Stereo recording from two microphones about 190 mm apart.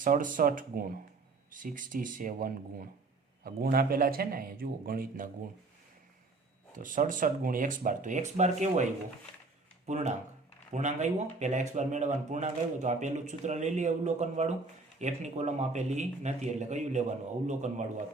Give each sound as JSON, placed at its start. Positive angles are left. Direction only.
{"t": 0.0, "sound": "speech", "side_deg": -45}
{"t": 6.7, "sound": "speech", "side_deg": -45}